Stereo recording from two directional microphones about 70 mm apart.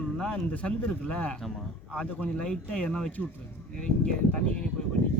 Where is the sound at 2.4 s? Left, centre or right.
Centre.